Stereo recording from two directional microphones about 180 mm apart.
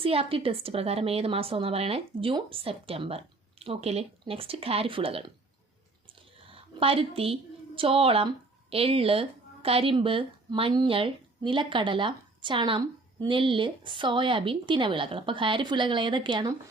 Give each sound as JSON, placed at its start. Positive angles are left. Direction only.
{"t": 0.0, "sound": "a woman's voice", "side_deg": -30}
{"t": 6.5, "sound": "a woman's voice", "side_deg": -30}